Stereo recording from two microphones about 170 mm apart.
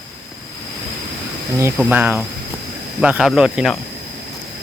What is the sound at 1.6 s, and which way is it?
Speech, 10° right (ahead or behind).